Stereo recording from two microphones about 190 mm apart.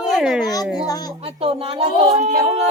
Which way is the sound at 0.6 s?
Centre (ahead or behind).